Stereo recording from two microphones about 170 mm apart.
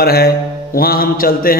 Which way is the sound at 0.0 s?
65° left (ahead or behind).